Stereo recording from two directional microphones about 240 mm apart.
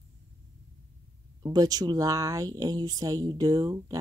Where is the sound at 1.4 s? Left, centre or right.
Centre.